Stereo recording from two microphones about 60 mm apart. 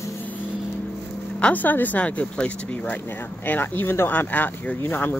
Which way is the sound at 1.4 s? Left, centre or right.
Left.